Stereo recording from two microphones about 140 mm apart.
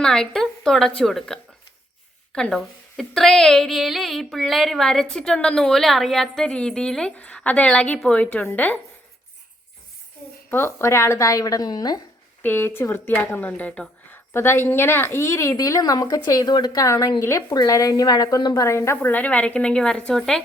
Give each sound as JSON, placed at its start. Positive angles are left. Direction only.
{"t": 0.0, "sound": "a woman's voice", "side_deg": 5}
{"t": 10.5, "sound": "speech", "side_deg": 15}
{"t": 12.4, "sound": "a woman's voice", "side_deg": 15}